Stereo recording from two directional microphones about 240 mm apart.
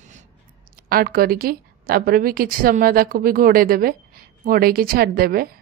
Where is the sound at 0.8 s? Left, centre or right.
Right.